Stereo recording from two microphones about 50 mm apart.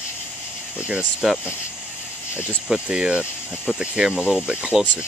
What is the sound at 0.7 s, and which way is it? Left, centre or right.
Speech, right.